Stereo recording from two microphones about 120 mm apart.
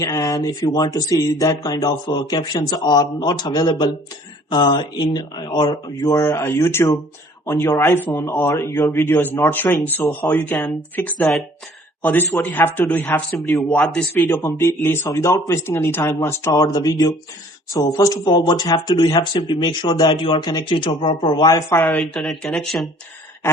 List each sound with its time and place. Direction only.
0.0 s speech: 25° left (ahead or behind)
12.4 s speech: 15° left (ahead or behind); by 21.6 s 35° left (ahead or behind)
21.7 s speech: 15° left (ahead or behind)
22.2 s speech: centre (ahead or behind)